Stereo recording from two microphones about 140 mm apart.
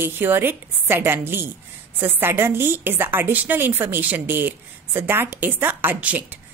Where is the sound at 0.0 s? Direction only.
15° right (ahead or behind).